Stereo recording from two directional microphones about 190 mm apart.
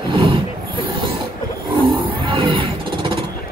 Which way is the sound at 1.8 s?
25° right (ahead or behind).